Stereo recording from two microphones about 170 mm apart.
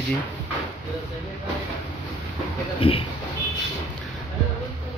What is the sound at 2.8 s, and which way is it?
Speech, 30° left (ahead or behind).